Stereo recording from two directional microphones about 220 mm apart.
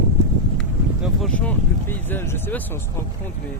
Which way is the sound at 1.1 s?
5° left (ahead or behind).